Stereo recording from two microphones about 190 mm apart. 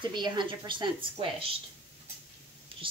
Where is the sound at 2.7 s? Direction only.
25° right (ahead or behind).